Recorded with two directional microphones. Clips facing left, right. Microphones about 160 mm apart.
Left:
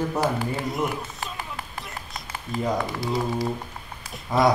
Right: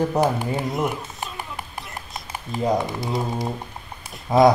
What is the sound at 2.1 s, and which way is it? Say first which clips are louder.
Speech: even; 20° right (ahead or behind).